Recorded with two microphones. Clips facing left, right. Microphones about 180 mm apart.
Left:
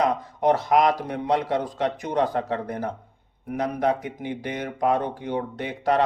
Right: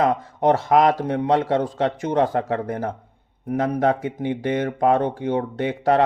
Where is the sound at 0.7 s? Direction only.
40° right (ahead or behind).